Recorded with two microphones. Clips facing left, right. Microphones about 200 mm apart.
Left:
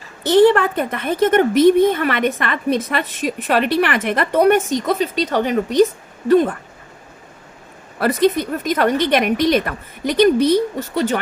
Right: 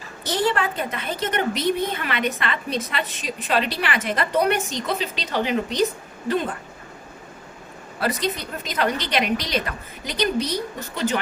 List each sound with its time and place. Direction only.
0.3 s a woman's voice: 55° left (ahead or behind)
7.9 s a woman's voice: 55° left (ahead or behind)